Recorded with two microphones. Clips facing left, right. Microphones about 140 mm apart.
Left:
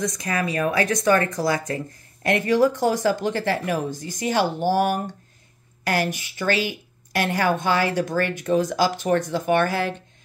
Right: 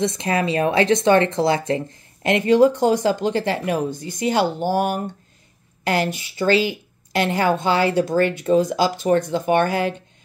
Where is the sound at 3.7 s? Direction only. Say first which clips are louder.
Right 3 dB; 50° right (ahead or behind).